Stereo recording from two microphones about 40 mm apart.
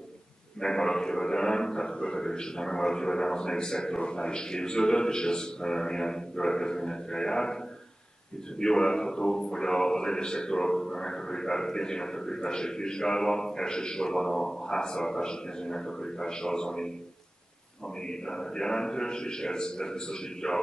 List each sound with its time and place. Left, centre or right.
0.6 s speech: centre
8.5 s speech: centre
18.0 s a man's voice: centre